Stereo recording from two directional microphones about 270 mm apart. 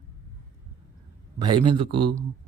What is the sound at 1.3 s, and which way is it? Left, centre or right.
Speech, centre.